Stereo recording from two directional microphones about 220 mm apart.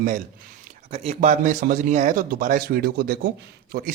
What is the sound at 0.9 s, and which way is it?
Speech, 30° right (ahead or behind).